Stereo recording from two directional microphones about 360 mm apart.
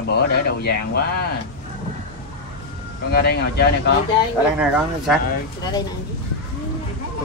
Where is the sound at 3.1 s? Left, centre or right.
Left.